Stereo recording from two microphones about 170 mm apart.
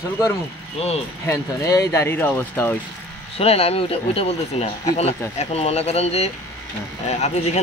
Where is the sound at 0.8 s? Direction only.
35° left (ahead or behind).